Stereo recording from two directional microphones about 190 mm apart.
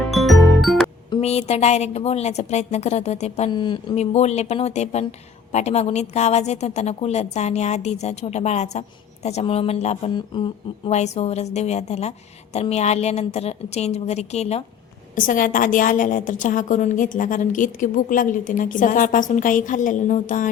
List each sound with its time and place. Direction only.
0.0 s music: centre (ahead or behind)
1.1 s a woman's voice: 35° left (ahead or behind)